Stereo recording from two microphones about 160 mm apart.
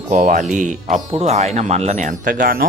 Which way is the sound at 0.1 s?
55° right (ahead or behind).